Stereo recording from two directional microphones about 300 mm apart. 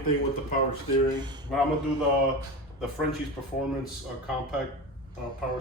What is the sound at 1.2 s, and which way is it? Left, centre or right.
Speech, centre.